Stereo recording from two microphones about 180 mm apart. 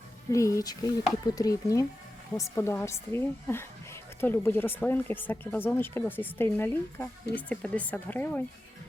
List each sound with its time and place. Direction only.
0.3 s speech: 15° left (ahead or behind)